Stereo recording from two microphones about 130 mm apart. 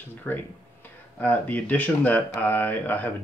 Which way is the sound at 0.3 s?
15° left (ahead or behind).